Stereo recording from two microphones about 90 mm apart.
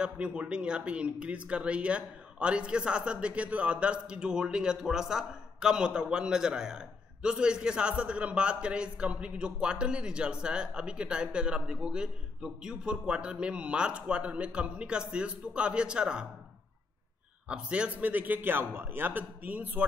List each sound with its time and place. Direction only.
0.0 s speech: 15° right (ahead or behind)
17.5 s a man's voice: 10° right (ahead or behind)